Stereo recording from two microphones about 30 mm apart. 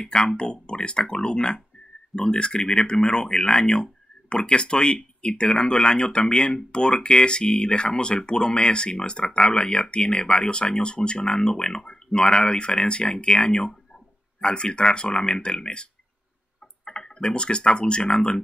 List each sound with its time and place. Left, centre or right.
0.0 s speech: left